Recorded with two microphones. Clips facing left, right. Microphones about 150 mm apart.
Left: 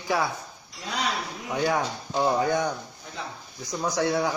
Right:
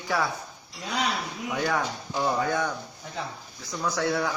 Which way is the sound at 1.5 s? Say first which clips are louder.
Left 2 dB; 25° left (ahead or behind).